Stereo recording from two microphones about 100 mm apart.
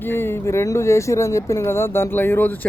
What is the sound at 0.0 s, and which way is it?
Speech, 25° left (ahead or behind).